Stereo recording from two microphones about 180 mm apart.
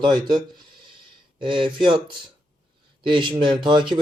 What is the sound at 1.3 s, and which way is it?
Speech, 25° right (ahead or behind).